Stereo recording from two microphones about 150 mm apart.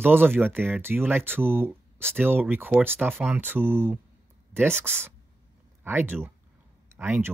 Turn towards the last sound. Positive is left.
turn(degrees=-15)  # may be behind; listen again after turning